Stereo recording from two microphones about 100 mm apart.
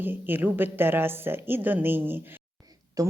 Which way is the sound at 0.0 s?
20° right (ahead or behind).